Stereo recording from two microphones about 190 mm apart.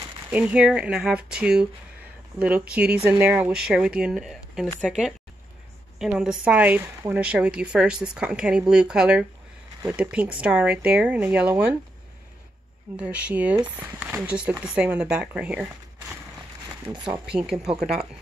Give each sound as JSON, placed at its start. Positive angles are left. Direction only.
{"t": 0.3, "sound": "speech", "side_deg": -5}
{"t": 12.9, "sound": "speech", "side_deg": -5}
{"t": 17.3, "sound": "speech", "side_deg": -5}